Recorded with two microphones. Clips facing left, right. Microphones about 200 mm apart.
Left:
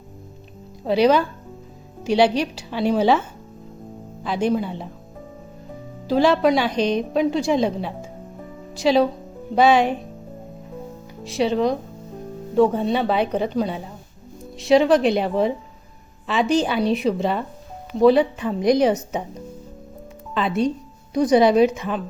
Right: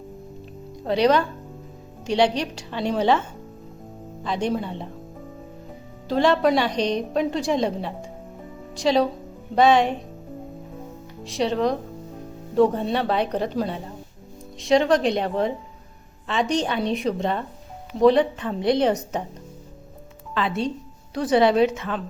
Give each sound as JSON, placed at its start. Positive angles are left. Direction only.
{"t": 0.9, "sound": "a woman's voice", "side_deg": 5}
{"t": 6.1, "sound": "a woman's voice", "side_deg": 5}
{"t": 11.2, "sound": "a woman's voice", "side_deg": 0}
{"t": 20.3, "sound": "a woman's voice", "side_deg": 15}